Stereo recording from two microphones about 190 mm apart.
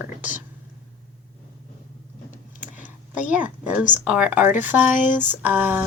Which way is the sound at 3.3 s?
10° right (ahead or behind).